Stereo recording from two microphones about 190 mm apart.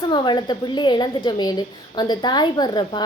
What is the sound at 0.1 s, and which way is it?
A woman's voice, 25° left (ahead or behind).